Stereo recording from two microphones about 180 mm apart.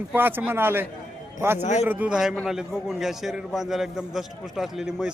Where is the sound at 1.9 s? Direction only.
10° right (ahead or behind).